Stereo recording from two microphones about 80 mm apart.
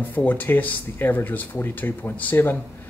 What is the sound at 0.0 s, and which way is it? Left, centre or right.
Speech, left.